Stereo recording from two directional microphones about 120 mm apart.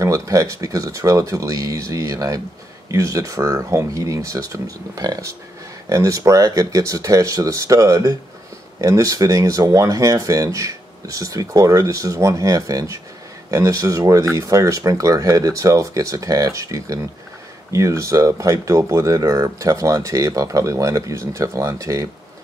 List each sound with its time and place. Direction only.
0.0 s speech: 25° right (ahead or behind)